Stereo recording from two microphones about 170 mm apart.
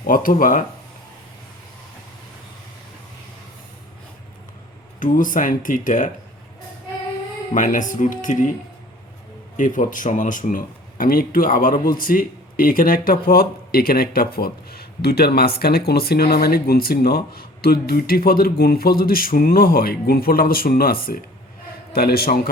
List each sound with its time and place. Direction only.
0.1 s speech: 55° left (ahead or behind)
4.9 s speech: 50° left (ahead or behind)
7.5 s speech: 50° left (ahead or behind)
9.6 s speech: 50° left (ahead or behind); by 22.4 s 65° left (ahead or behind)